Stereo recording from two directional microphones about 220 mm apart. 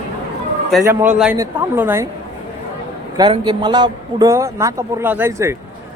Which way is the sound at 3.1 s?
20° right (ahead or behind).